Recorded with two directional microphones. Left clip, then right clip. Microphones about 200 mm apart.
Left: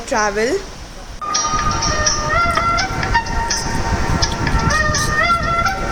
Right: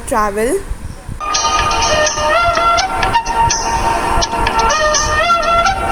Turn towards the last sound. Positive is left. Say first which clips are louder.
# right 5 dB
turn(degrees=-50)  # may be behind; listen again after turning